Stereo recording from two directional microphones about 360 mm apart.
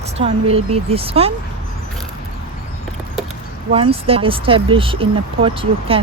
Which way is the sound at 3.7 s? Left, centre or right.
Centre.